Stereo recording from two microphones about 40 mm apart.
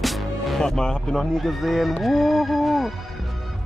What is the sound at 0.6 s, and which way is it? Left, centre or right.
Speech, centre.